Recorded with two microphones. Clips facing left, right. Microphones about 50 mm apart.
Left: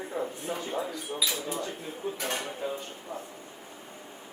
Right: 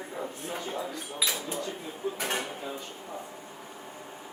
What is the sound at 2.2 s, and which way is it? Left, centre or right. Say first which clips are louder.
Speech: right 2 dB; centre.